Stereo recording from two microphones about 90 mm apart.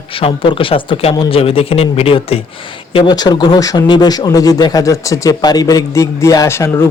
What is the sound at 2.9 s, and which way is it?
Speech, 50° left (ahead or behind).